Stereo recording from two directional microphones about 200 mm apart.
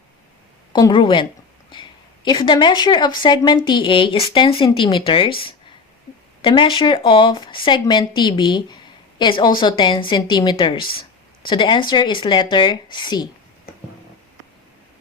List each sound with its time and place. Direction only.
0.7 s speech: 25° left (ahead or behind)